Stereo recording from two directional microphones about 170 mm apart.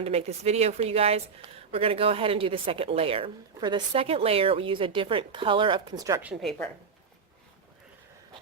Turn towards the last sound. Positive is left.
turn(degrees=0)  # may be behind; listen again after turning